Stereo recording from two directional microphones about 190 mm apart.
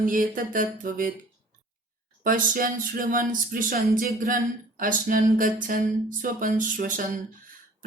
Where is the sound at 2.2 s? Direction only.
45° right (ahead or behind).